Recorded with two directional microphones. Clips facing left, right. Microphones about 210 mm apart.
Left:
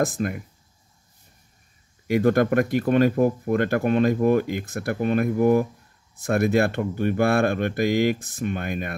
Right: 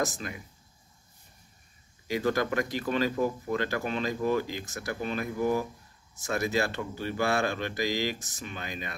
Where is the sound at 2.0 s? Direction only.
55° left (ahead or behind).